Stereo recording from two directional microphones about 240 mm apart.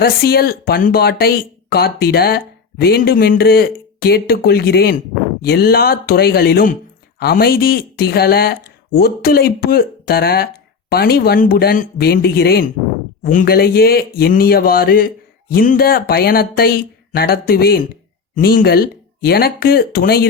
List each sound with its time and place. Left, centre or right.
0.0 s speech: left